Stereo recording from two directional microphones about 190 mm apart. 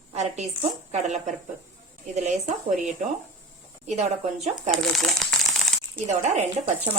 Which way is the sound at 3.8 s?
35° right (ahead or behind).